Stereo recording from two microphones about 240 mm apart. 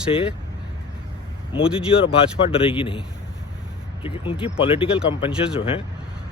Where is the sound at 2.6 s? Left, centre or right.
Left.